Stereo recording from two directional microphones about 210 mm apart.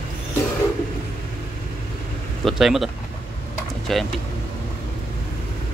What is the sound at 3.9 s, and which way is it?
Speech, centre (ahead or behind).